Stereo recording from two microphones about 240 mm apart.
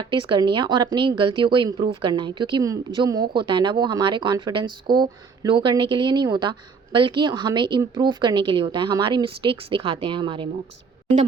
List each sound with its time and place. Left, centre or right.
0.0 s speech: centre